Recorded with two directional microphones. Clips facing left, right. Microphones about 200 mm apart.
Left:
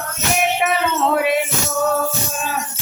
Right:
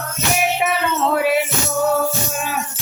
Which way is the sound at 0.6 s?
Centre (ahead or behind).